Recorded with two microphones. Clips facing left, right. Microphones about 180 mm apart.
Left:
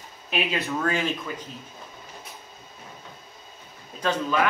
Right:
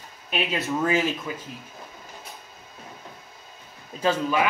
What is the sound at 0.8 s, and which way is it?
Speech, 5° right (ahead or behind).